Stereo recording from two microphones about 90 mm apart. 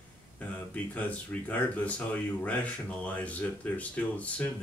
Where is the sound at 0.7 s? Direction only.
15° left (ahead or behind).